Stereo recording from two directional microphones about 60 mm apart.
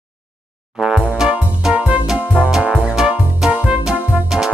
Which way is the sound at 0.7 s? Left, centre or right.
Centre.